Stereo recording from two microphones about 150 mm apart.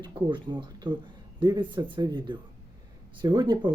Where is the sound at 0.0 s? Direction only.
35° right (ahead or behind).